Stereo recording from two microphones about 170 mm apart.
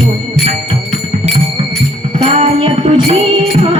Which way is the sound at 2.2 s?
35° right (ahead or behind).